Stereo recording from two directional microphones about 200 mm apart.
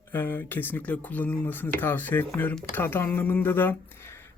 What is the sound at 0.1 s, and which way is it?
Speech, 10° left (ahead or behind).